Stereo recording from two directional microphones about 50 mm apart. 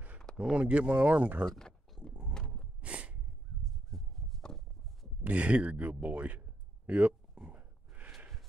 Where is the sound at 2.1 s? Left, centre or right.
Right.